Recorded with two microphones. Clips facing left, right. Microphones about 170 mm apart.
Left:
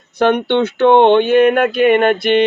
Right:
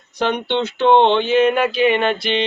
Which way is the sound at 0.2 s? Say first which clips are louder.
Left 6 dB; 55° left (ahead or behind).